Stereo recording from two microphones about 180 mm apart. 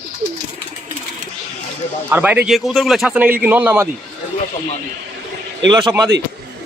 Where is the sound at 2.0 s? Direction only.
10° right (ahead or behind).